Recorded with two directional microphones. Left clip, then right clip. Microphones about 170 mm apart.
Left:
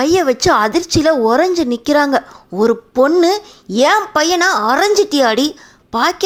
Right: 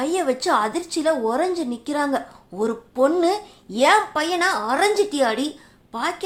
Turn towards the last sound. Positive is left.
turn(degrees=40)  # may be behind; listen again after turning